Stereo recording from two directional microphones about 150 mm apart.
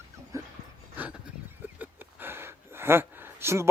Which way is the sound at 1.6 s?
10° right (ahead or behind).